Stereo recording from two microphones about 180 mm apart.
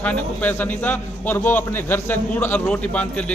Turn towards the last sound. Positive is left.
turn(degrees=5)  # may be behind; listen again after turning